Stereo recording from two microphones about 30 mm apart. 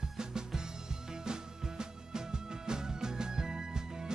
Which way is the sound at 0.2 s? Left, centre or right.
Right.